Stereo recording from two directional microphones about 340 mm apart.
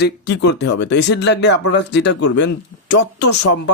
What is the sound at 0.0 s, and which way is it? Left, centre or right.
Speech, left.